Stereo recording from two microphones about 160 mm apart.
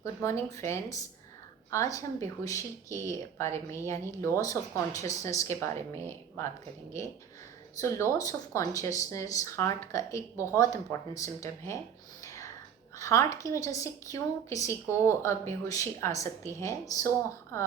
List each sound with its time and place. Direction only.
0.0 s speech: 15° left (ahead or behind)
7.8 s speech: 20° left (ahead or behind)
12.2 s whispering: 20° left (ahead or behind)
13.0 s speech: 20° left (ahead or behind)